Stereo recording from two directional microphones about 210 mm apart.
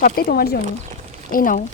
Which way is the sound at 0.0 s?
45° left (ahead or behind).